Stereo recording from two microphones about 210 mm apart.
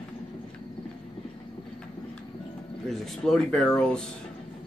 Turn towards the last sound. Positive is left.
turn(degrees=5)  # may be behind; listen again after turning